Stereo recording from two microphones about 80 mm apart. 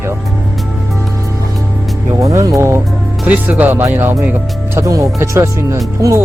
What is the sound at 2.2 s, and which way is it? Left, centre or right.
Speech, right.